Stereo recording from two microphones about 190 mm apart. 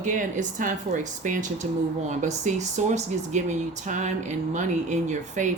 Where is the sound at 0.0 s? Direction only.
40° right (ahead or behind).